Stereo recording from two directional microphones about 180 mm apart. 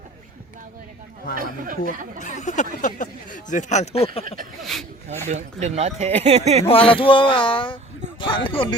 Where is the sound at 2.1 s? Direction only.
40° left (ahead or behind).